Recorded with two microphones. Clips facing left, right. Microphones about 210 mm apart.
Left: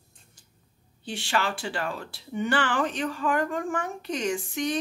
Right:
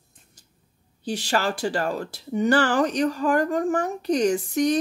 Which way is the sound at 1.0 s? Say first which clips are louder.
Right 4 dB; 40° right (ahead or behind).